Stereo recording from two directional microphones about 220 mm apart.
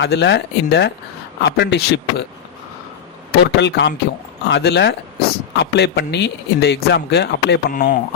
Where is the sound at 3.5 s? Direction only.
50° left (ahead or behind).